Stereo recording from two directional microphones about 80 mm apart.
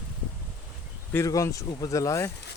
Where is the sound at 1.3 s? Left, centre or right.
Left.